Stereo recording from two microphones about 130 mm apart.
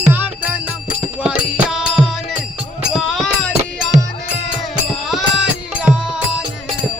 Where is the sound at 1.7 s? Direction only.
Centre (ahead or behind).